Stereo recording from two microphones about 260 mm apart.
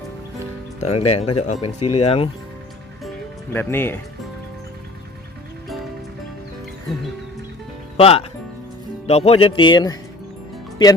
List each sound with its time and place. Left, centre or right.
0.8 s speech: left
3.5 s speech: centre
7.9 s speech: left